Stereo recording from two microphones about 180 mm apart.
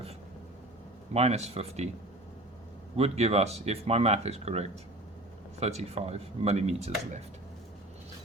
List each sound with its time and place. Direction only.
1.1 s speech: 35° right (ahead or behind)
2.9 s speech: 35° right (ahead or behind)